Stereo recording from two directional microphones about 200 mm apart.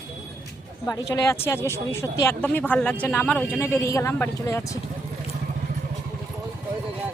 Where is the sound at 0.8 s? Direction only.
15° left (ahead or behind).